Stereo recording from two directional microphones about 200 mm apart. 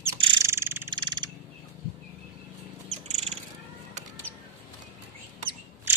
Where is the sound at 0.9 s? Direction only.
25° right (ahead or behind).